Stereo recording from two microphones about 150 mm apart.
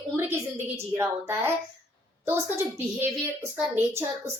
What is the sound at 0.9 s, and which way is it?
A woman's voice, 20° right (ahead or behind).